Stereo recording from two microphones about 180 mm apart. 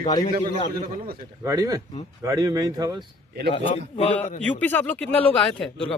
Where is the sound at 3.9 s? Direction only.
40° left (ahead or behind).